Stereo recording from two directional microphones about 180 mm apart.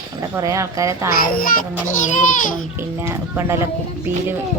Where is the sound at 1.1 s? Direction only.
55° left (ahead or behind).